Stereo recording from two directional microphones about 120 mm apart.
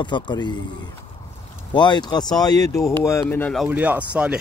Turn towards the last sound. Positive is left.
turn(degrees=-10)  # may be behind; listen again after turning